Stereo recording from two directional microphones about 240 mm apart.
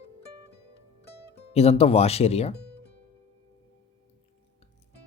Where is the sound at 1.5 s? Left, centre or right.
Left.